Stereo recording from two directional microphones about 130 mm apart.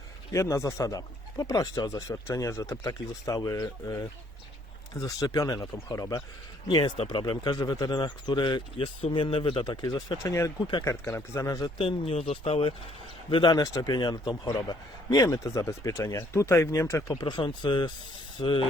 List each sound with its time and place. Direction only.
0.3 s speech: 25° left (ahead or behind)
10.8 s speech: 20° left (ahead or behind)
11.8 s speech: 45° left (ahead or behind)
13.3 s speech: 35° left (ahead or behind)
17.2 s speech: 35° left (ahead or behind)